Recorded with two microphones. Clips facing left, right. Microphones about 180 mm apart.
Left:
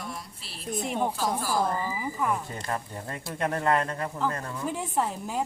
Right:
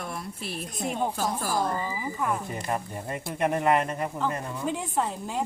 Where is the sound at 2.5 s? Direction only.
15° right (ahead or behind).